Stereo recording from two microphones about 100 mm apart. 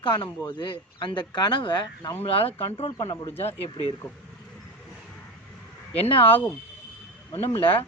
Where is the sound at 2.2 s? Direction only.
75° left (ahead or behind).